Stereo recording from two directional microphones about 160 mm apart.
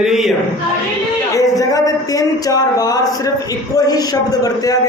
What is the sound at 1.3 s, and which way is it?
A man's voice, 20° left (ahead or behind).